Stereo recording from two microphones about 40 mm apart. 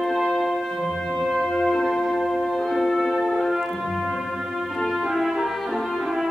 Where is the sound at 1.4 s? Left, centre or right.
Centre.